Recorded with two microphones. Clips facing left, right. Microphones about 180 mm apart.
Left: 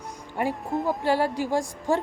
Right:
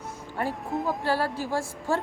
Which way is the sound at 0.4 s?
15° left (ahead or behind).